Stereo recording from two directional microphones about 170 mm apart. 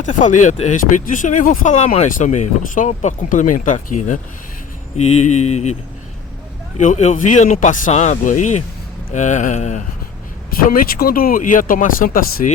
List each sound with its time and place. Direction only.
0.0 s speech: 50° left (ahead or behind)
6.7 s speech: 45° left (ahead or behind)
10.5 s speech: 60° left (ahead or behind)